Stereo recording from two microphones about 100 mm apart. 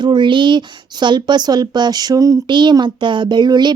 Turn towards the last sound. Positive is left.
turn(degrees=-45)  # may be behind; listen again after turning